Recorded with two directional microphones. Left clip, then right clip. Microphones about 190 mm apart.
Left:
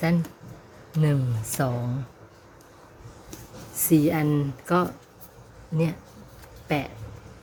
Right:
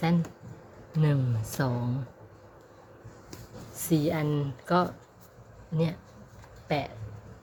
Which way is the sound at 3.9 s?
15° left (ahead or behind).